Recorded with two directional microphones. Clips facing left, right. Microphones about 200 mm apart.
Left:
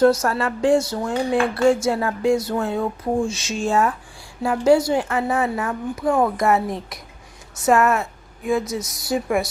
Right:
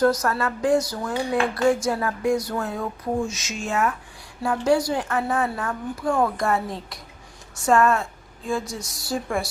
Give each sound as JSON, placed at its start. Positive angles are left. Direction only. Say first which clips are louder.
{"t": 0.0, "sound": "speech", "louder": "left 4 dB", "side_deg": 25}